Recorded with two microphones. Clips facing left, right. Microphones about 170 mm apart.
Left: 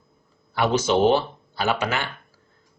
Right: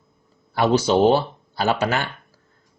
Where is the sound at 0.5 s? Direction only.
35° right (ahead or behind).